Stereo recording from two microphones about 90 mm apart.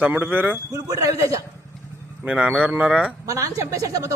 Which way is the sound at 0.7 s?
40° right (ahead or behind).